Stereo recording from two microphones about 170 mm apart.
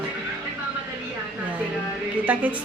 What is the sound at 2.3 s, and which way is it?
Speech, 10° right (ahead or behind).